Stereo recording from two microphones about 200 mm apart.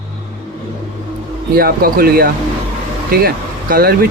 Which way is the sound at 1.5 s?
50° right (ahead or behind).